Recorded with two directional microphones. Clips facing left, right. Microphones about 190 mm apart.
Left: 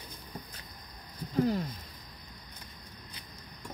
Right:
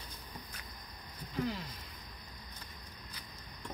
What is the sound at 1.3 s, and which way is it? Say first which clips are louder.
Speech: left 8 dB; 45° left (ahead or behind).